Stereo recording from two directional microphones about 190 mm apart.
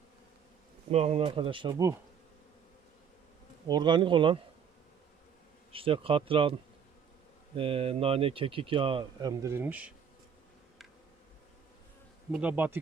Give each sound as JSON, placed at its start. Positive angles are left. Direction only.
{"t": 0.9, "sound": "speech", "side_deg": -35}
{"t": 1.7, "sound": "speech", "side_deg": -15}
{"t": 3.7, "sound": "speech", "side_deg": -25}
{"t": 5.7, "sound": "speech", "side_deg": -30}
{"t": 9.4, "sound": "speech", "side_deg": -10}
{"t": 12.3, "sound": "speech", "side_deg": -5}